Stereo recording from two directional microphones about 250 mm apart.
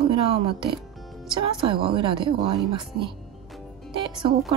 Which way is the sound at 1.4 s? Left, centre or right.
Right.